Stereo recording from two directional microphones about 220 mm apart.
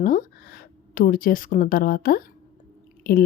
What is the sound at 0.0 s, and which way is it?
Speech, 40° left (ahead or behind).